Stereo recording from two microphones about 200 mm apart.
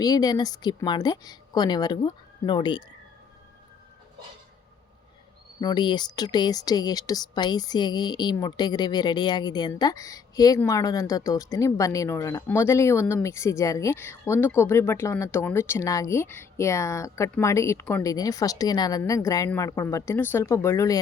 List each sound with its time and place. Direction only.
0.0 s speech: 20° left (ahead or behind)
5.5 s speech: 20° left (ahead or behind)